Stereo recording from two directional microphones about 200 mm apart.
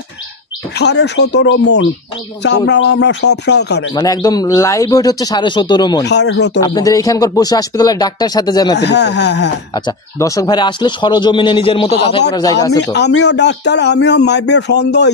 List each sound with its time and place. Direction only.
0.7 s a man's voice: 60° left (ahead or behind)
3.9 s a man's voice: 20° left (ahead or behind)
6.0 s a man's voice: 60° left (ahead or behind)
6.6 s a man's voice: 20° left (ahead or behind)
8.7 s a man's voice: 60° left (ahead or behind)
9.8 s a man's voice: 20° left (ahead or behind)
12.9 s a man's voice: 60° left (ahead or behind)